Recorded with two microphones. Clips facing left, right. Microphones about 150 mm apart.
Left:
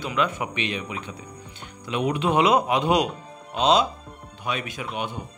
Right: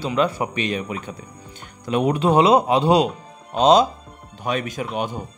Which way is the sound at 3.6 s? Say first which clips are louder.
Right 5 dB; 45° right (ahead or behind).